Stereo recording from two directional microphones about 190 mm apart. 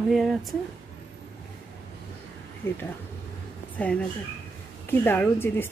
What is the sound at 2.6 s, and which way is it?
Speech, 10° left (ahead or behind).